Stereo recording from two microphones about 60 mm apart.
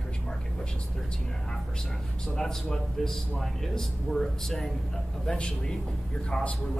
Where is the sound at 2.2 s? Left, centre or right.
Centre.